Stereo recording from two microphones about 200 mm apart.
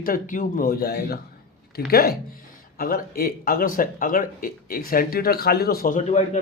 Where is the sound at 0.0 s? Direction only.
45° left (ahead or behind).